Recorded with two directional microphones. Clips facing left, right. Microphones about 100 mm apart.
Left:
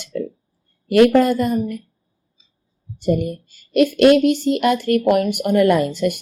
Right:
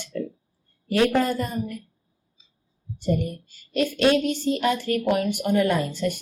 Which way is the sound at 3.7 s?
70° left (ahead or behind).